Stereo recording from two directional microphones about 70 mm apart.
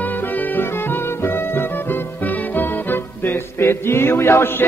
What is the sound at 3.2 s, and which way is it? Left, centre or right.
A man's voice, left.